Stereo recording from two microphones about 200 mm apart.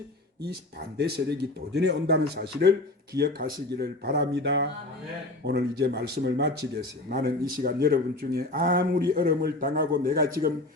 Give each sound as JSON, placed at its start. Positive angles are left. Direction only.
{"t": 0.9, "sound": "speech", "side_deg": -55}